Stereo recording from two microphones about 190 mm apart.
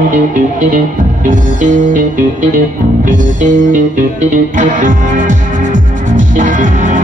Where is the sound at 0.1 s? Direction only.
40° right (ahead or behind).